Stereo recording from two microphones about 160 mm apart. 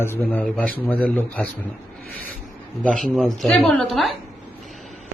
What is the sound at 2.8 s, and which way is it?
Speech, centre (ahead or behind).